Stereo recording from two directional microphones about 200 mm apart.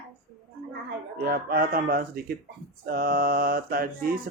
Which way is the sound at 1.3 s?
45° right (ahead or behind).